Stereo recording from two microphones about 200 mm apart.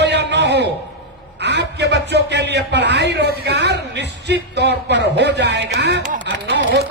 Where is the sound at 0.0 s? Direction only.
60° right (ahead or behind).